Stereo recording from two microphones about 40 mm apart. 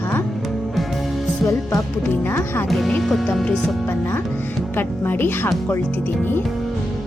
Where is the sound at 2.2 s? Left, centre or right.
Left.